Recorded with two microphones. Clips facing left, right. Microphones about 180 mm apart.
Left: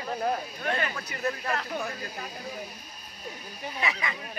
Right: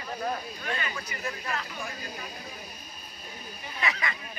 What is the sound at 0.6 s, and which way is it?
Speech, 55° left (ahead or behind).